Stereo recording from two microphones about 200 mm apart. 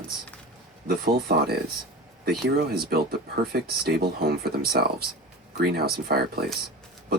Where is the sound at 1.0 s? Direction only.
50° right (ahead or behind).